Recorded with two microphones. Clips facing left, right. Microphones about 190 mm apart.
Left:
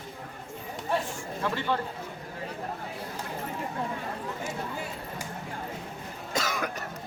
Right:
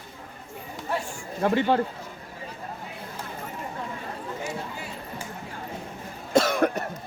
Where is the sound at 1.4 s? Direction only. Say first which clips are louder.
Right 8 dB; 50° right (ahead or behind).